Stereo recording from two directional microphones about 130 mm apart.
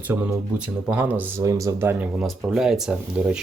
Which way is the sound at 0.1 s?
20° right (ahead or behind).